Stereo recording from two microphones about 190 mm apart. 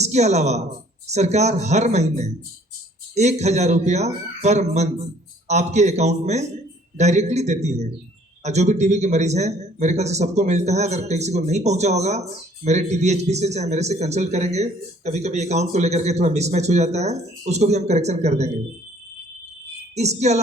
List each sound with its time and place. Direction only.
0.0 s a man's voice: 35° right (ahead or behind)
20.0 s a man's voice: 35° right (ahead or behind)